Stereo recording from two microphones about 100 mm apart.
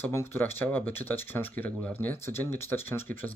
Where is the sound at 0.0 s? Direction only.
25° left (ahead or behind).